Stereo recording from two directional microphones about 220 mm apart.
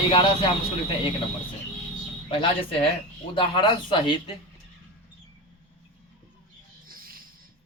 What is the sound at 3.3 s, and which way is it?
Speech, 25° left (ahead or behind).